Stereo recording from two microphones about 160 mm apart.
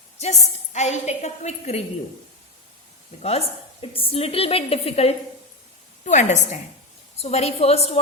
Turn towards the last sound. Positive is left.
turn(degrees=40)  # may be behind; listen again after turning